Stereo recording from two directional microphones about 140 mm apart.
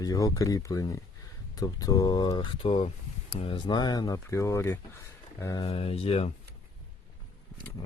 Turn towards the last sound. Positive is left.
turn(degrees=45)  # may be behind; listen again after turning